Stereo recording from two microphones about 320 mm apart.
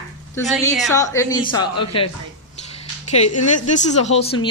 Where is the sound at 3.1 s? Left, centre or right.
Left.